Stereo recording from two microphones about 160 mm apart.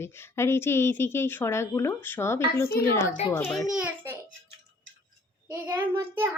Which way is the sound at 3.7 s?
10° right (ahead or behind).